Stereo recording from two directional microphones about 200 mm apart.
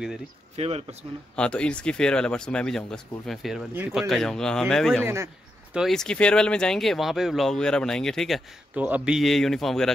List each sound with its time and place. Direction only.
0.6 s speech: 30° right (ahead or behind)
1.3 s speech: 5° left (ahead or behind)
5.0 s a sound: 15° right (ahead or behind)
5.8 s speech: centre (ahead or behind)